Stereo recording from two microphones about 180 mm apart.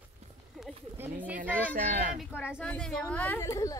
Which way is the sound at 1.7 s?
45° right (ahead or behind).